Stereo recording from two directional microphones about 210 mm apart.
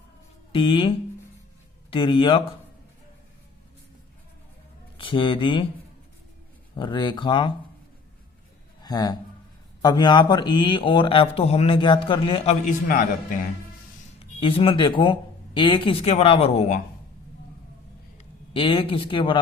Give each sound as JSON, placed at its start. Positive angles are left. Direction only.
{"t": 0.5, "sound": "speech", "side_deg": 25}
{"t": 4.9, "sound": "speech", "side_deg": 25}
{"t": 6.7, "sound": "speech", "side_deg": 20}
{"t": 8.8, "sound": "a man's voice", "side_deg": 20}
{"t": 12.6, "sound": "a man's voice", "side_deg": 35}
{"t": 14.2, "sound": "speech", "side_deg": 25}
{"t": 18.5, "sound": "speech", "side_deg": 25}